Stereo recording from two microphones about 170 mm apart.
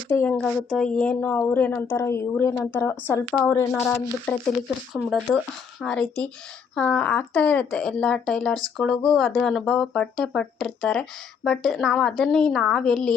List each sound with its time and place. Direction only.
0.1 s a woman's voice: 10° left (ahead or behind)
5.8 s speech: 5° left (ahead or behind)